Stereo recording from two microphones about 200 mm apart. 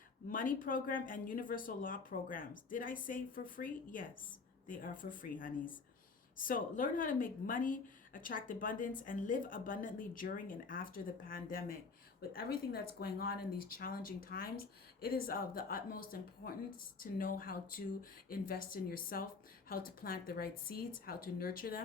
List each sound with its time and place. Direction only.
0.3 s a woman's voice: 45° left (ahead or behind)